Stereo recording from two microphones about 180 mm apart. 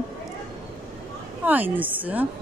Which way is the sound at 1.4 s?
10° right (ahead or behind).